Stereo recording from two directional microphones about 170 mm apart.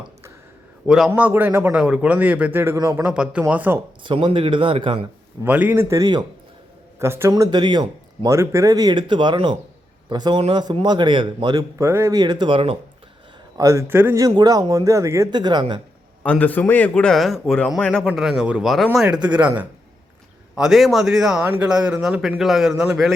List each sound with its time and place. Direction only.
0.9 s a man's voice: 5° right (ahead or behind)
4.0 s speech: 30° right (ahead or behind)
5.4 s a man's voice: 10° right (ahead or behind); by 12.7 s 30° right (ahead or behind)
13.6 s a man's voice: 20° right (ahead or behind)
16.2 s a man's voice: 10° left (ahead or behind)